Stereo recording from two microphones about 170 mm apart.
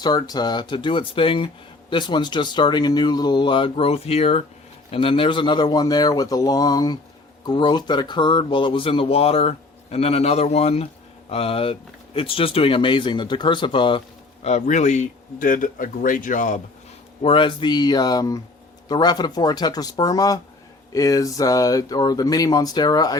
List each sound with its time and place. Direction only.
0.0 s speech: 25° left (ahead or behind)
14.4 s a man's voice: 40° left (ahead or behind)
17.2 s speech: 30° left (ahead or behind)